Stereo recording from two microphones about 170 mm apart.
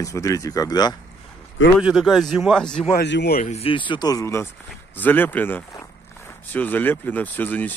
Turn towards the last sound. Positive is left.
turn(degrees=10)  # may be behind; listen again after turning